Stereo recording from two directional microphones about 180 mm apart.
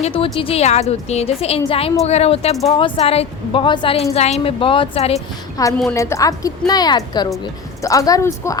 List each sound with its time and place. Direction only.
0.0 s a woman's voice: 30° left (ahead or behind)
5.6 s a woman's voice: 20° left (ahead or behind)